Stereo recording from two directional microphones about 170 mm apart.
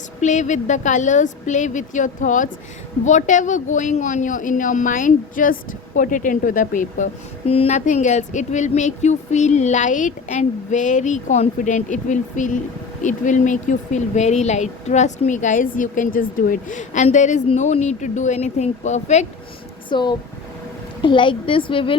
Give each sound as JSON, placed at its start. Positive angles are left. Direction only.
{"t": 0.2, "sound": "speech", "side_deg": 45}
{"t": 7.4, "sound": "speech", "side_deg": 35}
{"t": 19.9, "sound": "a woman's voice", "side_deg": 25}